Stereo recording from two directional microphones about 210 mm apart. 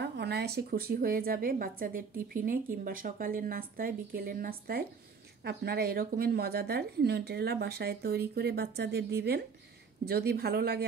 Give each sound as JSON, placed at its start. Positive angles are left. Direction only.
{"t": 0.0, "sound": "a woman's voice", "side_deg": -50}